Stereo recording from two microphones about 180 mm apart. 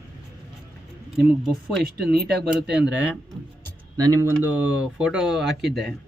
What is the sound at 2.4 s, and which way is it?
Speech, 5° right (ahead or behind).